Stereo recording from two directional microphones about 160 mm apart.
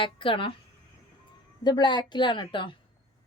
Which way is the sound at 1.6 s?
25° left (ahead or behind).